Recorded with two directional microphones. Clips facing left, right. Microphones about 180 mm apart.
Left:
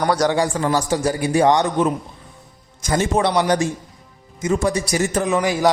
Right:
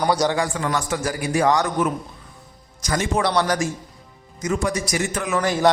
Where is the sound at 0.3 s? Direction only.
35° left (ahead or behind).